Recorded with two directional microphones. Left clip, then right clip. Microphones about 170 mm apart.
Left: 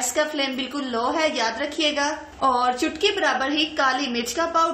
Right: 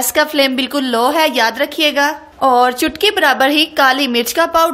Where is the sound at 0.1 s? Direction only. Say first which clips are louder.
Right 12 dB; 60° right (ahead or behind).